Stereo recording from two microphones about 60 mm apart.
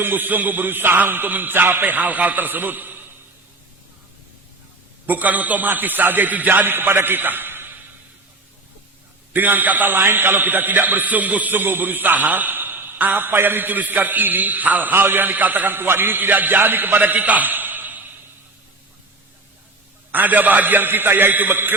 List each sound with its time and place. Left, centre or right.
0.0 s a man's voice: right
5.0 s a man's voice: right
9.3 s a man's voice: right
20.1 s a man's voice: right